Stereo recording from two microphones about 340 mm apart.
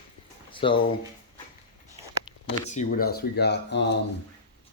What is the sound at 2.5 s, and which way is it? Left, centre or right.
Speech, left.